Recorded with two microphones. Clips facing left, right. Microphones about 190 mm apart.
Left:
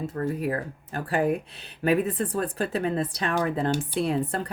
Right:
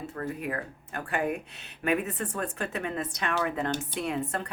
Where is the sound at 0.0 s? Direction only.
40° left (ahead or behind).